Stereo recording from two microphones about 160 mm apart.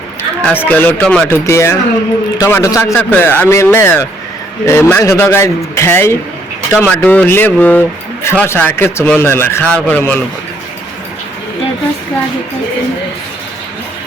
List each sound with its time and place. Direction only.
0.4 s a man's voice: 10° left (ahead or behind)